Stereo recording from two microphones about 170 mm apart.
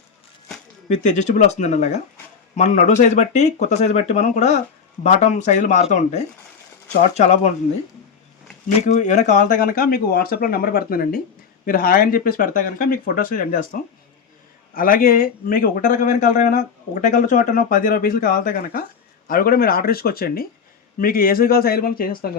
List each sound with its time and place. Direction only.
1.0 s speech: 45° left (ahead or behind)
8.9 s speech: 45° left (ahead or behind)